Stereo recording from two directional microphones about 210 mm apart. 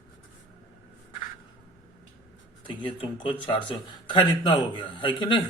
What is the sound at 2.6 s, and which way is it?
A man's voice, 20° left (ahead or behind).